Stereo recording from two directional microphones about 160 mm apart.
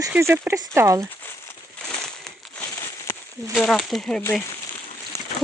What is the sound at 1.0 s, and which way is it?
Crumpling, 10° left (ahead or behind).